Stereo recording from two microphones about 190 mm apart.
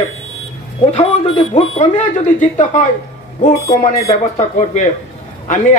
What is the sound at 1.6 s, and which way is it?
Speech, 35° left (ahead or behind).